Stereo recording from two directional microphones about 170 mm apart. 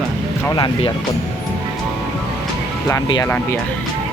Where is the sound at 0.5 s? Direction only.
30° left (ahead or behind).